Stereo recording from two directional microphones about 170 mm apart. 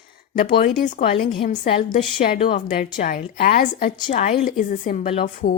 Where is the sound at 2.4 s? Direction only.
35° left (ahead or behind).